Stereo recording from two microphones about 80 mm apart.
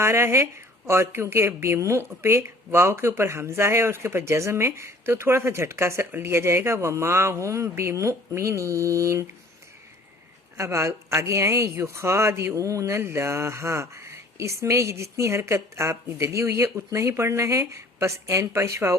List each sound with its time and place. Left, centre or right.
0.0 s speech: right
10.6 s speech: right